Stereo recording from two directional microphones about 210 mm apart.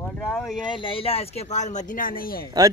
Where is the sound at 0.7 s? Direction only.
25° left (ahead or behind); by 2.4 s 45° left (ahead or behind).